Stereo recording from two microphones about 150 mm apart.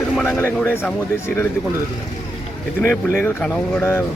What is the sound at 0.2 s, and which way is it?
Speech, 15° left (ahead or behind).